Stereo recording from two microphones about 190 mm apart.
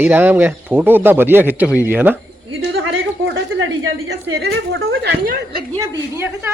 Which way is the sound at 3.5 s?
90° right.